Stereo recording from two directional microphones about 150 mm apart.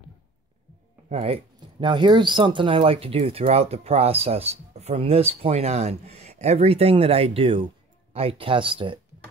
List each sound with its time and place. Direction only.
1.0 s speech: 45° right (ahead or behind)